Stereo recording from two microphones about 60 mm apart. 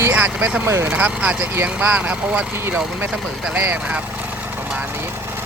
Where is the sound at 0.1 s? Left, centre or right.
Right.